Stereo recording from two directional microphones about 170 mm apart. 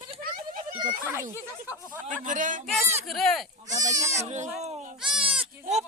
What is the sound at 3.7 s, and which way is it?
Speech, 45° right (ahead or behind).